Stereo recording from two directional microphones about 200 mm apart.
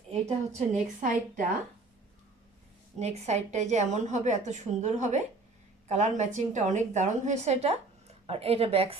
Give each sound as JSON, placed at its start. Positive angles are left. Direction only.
{"t": 0.7, "sound": "a woman's voice", "side_deg": -40}
{"t": 3.0, "sound": "a woman's voice", "side_deg": -35}